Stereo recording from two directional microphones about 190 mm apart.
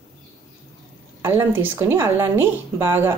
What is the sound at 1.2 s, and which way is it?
Speech, 10° right (ahead or behind).